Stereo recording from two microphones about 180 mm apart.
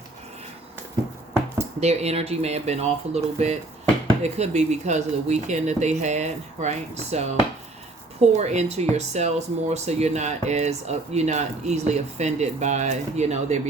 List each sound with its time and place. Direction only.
1.8 s speech: 35° right (ahead or behind)